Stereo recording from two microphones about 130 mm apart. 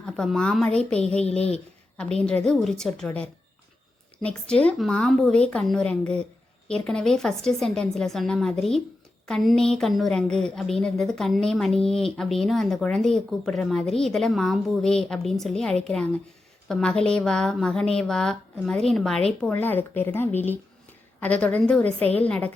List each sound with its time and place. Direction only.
0.0 s a woman's voice: 5° left (ahead or behind)
1.2 s speech: 55° left (ahead or behind)
1.5 s a sound: 10° left (ahead or behind)
2.2 s a woman's voice: 5° left (ahead or behind)
19.5 s a woman's voice: 15° left (ahead or behind)